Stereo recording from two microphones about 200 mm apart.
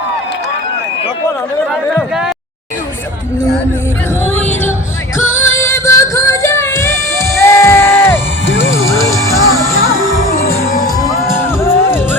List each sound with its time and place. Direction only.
1.7 s a sound: centre (ahead or behind)
5.1 s music: 10° left (ahead or behind)
8.4 s music: 70° left (ahead or behind)
8.7 s music: 15° left (ahead or behind)